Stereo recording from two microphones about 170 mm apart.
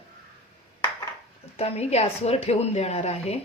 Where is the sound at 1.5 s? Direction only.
40° left (ahead or behind).